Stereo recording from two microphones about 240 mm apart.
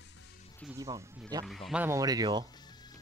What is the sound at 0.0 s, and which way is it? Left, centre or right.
Music, left.